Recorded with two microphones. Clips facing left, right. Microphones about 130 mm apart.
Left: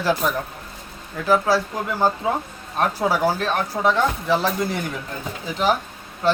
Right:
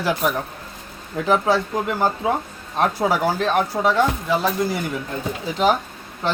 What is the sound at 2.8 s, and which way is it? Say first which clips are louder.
Speech: right 1 dB; 15° right (ahead or behind).